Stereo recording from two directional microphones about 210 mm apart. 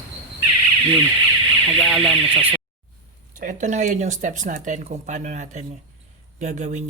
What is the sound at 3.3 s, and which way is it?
Speech, 40° right (ahead or behind).